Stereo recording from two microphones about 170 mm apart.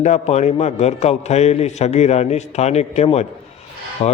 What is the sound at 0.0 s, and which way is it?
A man's voice, 40° left (ahead or behind).